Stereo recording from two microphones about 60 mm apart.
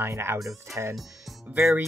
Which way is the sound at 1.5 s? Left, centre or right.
Right.